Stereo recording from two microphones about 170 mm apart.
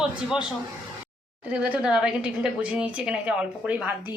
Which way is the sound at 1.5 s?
5° right (ahead or behind).